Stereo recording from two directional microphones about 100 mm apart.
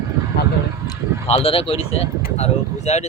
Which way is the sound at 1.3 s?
75° left (ahead or behind).